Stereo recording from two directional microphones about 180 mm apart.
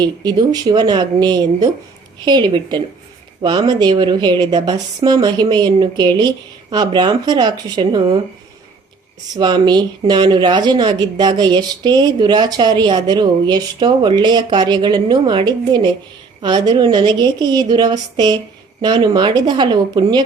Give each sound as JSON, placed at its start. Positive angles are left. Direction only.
{"t": 0.0, "sound": "a woman's voice", "side_deg": -25}
{"t": 9.3, "sound": "a woman's voice", "side_deg": -25}